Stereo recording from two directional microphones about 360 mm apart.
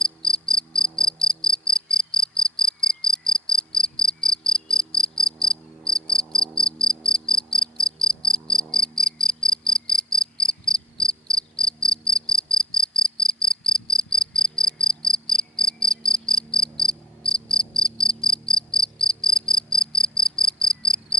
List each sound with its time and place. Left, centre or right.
0.2 s cricket: centre
5.5 s insect: centre
12.5 s cricket: centre
16.7 s insect: centre
19.7 s cricket: centre